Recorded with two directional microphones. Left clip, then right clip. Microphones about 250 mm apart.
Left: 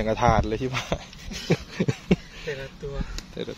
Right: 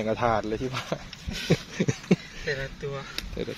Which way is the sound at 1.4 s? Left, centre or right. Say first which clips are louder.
Even; centre.